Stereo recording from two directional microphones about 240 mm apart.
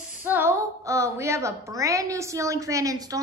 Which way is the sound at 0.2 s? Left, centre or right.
Centre.